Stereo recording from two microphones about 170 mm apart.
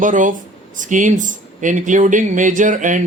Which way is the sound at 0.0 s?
50° right (ahead or behind).